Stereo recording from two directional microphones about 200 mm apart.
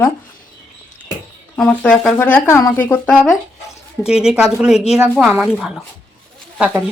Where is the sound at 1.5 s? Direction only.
5° left (ahead or behind).